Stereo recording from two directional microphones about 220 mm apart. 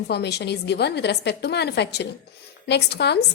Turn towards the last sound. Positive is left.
turn(degrees=50)  # may be behind; listen again after turning